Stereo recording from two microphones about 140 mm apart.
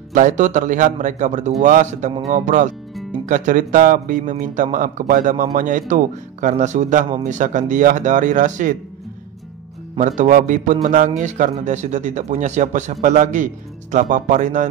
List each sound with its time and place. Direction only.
0.1 s a man's voice: 60° right (ahead or behind)
9.9 s a man's voice: 60° right (ahead or behind)